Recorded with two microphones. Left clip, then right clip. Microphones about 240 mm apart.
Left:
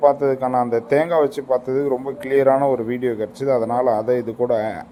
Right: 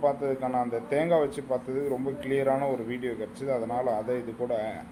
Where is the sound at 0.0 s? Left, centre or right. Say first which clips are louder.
Left 10 dB; left.